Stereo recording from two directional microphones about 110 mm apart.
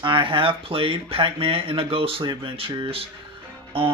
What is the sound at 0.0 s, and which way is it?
Speech, 50° right (ahead or behind).